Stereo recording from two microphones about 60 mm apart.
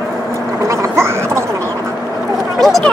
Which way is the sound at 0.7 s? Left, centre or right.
Right.